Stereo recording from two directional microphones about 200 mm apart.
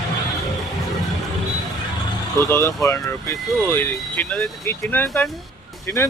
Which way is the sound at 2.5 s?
15° left (ahead or behind).